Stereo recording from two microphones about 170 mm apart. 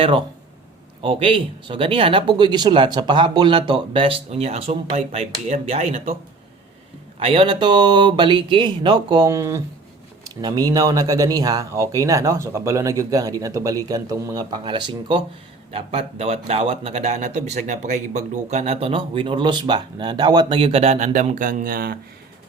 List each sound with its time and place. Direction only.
0.0 s speech: 30° right (ahead or behind)
7.2 s speech: 35° right (ahead or behind); by 21.9 s 60° right (ahead or behind)